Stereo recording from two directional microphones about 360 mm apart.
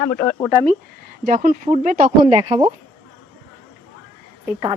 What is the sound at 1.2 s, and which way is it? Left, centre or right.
Speech, right.